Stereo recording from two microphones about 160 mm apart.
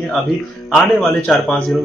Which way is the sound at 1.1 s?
Centre (ahead or behind).